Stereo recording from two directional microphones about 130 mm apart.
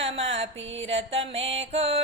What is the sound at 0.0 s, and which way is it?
Music, 50° right (ahead or behind).